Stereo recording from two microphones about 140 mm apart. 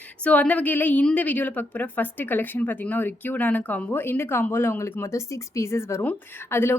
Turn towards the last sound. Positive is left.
turn(degrees=15)  # may be behind; listen again after turning